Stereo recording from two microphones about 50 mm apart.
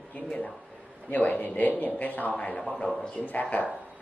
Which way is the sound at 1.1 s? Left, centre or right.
Left.